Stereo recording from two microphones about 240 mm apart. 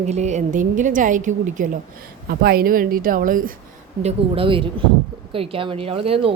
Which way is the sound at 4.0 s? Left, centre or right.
Right.